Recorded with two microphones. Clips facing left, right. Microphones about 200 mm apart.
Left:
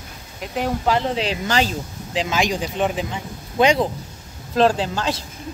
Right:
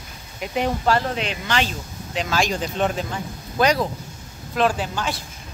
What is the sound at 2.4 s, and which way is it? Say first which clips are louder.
Speech: even; 15° left (ahead or behind).